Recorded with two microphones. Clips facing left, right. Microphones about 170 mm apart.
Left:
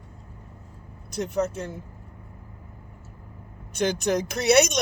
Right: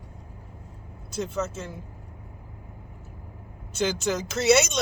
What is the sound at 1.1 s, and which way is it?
Speech, 20° left (ahead or behind).